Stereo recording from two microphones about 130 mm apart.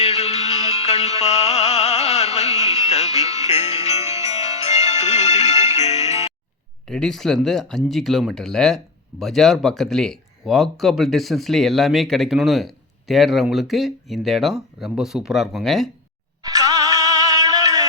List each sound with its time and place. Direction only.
0.0 s music: 55° left (ahead or behind)
6.8 s speech: 5° left (ahead or behind)
16.4 s music: 25° right (ahead or behind)